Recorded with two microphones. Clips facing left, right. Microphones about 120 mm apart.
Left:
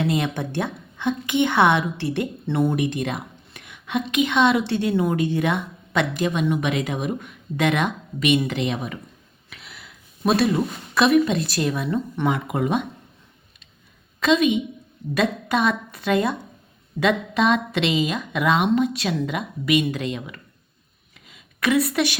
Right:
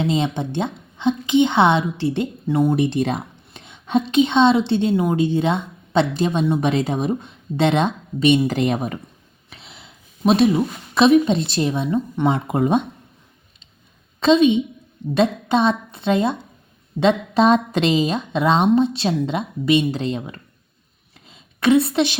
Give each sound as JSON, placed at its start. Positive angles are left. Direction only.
{"t": 0.0, "sound": "a woman's voice", "side_deg": -20}
{"t": 2.7, "sound": "a woman's voice", "side_deg": -30}
{"t": 8.4, "sound": "a woman's voice", "side_deg": -45}
{"t": 9.5, "sound": "speech", "side_deg": -25}
{"t": 11.9, "sound": "speech", "side_deg": -15}
{"t": 12.3, "sound": "a woman's voice", "side_deg": -30}
{"t": 14.2, "sound": "a woman's voice", "side_deg": -30}
{"t": 21.2, "sound": "a sound", "side_deg": -30}